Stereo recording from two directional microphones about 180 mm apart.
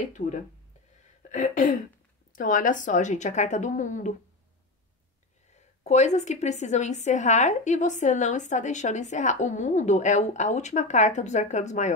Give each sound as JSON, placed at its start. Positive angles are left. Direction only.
{"t": 0.2, "sound": "a woman's voice", "side_deg": 45}
{"t": 5.5, "sound": "a woman's voice", "side_deg": 40}